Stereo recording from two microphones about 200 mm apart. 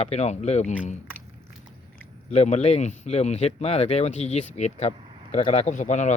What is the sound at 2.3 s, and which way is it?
Speech, 35° left (ahead or behind).